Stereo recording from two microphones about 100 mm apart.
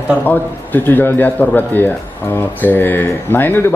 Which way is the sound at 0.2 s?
20° left (ahead or behind).